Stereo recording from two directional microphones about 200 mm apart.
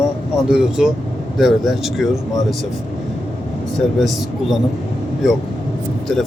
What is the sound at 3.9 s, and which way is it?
Speech, centre (ahead or behind).